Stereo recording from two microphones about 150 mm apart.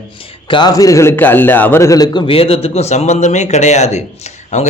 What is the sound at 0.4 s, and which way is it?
A man's voice, 30° left (ahead or behind).